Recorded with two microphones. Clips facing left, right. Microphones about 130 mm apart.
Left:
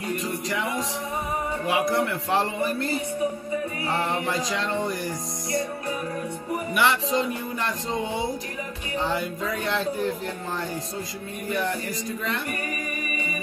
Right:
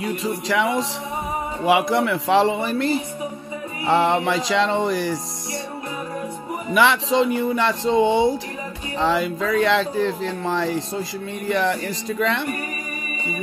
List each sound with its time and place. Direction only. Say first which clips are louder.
0.0 s music: right 4 dB; 85° right
1.7 s a man's voice: right 6 dB; 80° right
3.8 s music: right 12 dB; 80° right
6.8 s speech: right 6 dB; 90° right; by 8.3 s 75° right (ahead or behind)
9.0 s a man's voice: right 7 dB; 90° right